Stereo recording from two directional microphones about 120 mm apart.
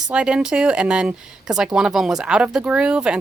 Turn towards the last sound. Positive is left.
turn(degrees=-10)  # may be behind; listen again after turning